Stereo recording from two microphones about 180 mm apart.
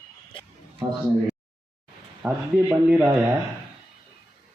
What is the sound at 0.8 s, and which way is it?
Speech, 20° right (ahead or behind).